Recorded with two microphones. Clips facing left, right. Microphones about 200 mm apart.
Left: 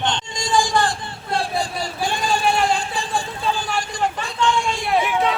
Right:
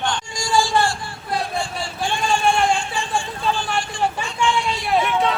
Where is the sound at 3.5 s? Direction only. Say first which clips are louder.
Right 1 dB; centre (ahead or behind).